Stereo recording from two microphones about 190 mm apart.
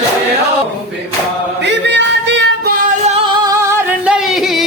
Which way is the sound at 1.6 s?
65° right (ahead or behind).